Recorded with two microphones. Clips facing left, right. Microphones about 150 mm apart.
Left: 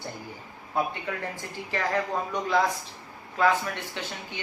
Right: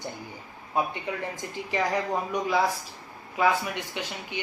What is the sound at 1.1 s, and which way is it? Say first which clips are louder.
Speech: right 1 dB; 20° right (ahead or behind).